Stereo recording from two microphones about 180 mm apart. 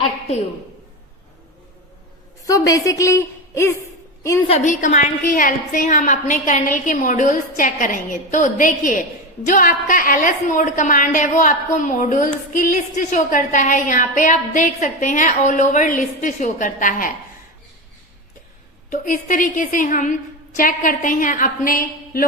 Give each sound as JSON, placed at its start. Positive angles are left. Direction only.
{"t": 2.5, "sound": "a woman's voice", "side_deg": 20}
{"t": 4.4, "sound": "a woman's voice", "side_deg": 40}
{"t": 18.9, "sound": "a woman's voice", "side_deg": 45}